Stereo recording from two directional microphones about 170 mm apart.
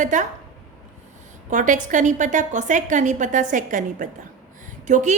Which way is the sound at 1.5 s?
50° right (ahead or behind).